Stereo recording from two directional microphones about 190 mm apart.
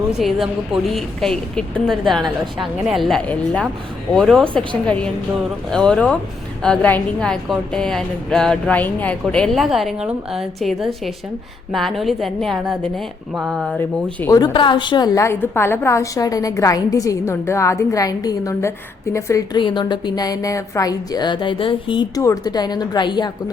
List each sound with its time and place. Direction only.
0.2 s a woman's voice: centre (ahead or behind)
13.7 s a woman's voice: 15° left (ahead or behind)